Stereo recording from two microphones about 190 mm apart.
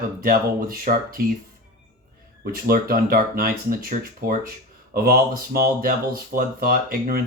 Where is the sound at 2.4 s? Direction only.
50° right (ahead or behind).